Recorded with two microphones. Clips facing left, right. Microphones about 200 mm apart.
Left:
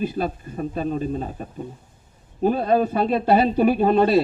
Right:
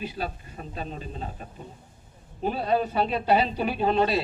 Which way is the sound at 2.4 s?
45° left (ahead or behind).